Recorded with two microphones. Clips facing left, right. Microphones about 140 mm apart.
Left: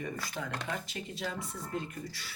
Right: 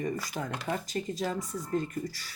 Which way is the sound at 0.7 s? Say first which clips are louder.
Right 6 dB; 40° right (ahead or behind).